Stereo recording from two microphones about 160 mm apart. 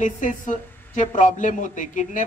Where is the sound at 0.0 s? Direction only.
50° left (ahead or behind).